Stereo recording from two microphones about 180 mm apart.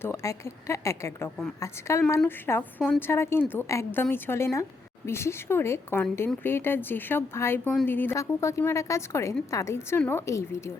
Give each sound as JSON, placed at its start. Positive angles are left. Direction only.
{"t": 0.0, "sound": "a woman's voice", "side_deg": 15}